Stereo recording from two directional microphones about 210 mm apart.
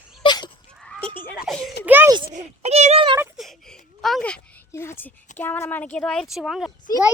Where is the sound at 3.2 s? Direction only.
Centre (ahead or behind).